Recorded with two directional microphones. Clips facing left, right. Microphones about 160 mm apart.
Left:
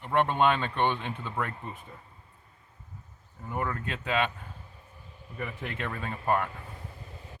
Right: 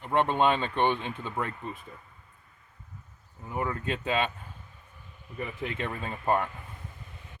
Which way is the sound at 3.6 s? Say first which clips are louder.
Right 2 dB; 20° right (ahead or behind).